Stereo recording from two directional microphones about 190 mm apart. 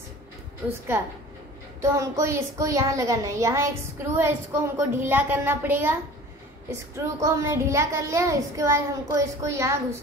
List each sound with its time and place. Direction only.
1.8 s a woman's voice: 15° right (ahead or behind)
7.0 s a woman's voice: 15° right (ahead or behind)